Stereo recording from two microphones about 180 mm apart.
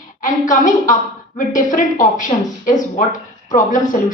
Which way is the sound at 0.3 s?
45° left (ahead or behind).